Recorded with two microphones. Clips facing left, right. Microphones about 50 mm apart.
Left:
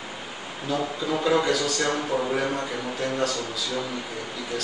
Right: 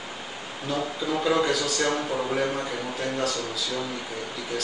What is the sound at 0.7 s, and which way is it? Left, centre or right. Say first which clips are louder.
A man's voice: left 1 dB; centre.